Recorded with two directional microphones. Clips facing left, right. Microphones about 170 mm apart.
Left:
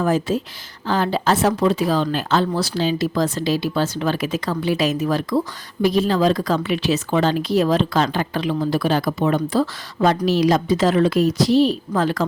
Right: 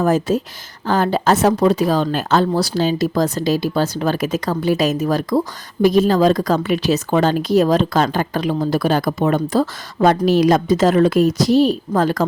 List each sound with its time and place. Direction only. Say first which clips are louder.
0.0 s speech: right 3 dB; 45° right (ahead or behind)